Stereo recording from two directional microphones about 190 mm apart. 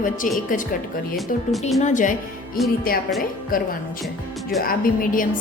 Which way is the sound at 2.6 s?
Centre (ahead or behind).